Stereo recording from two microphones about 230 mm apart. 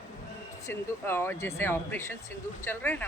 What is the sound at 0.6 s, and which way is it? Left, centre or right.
A woman's voice, centre.